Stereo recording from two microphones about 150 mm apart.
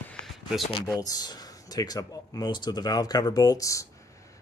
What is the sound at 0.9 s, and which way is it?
Speech, 25° left (ahead or behind).